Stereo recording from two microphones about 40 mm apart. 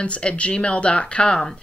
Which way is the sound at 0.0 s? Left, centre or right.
Left.